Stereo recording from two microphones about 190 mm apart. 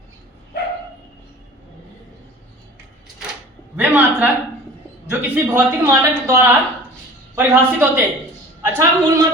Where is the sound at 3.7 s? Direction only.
5° right (ahead or behind).